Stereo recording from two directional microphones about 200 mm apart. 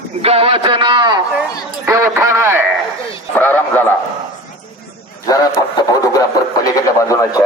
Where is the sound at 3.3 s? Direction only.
10° left (ahead or behind).